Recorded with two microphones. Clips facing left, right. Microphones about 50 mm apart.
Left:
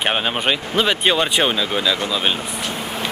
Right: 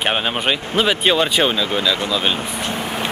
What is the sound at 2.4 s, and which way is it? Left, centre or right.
Speech, right.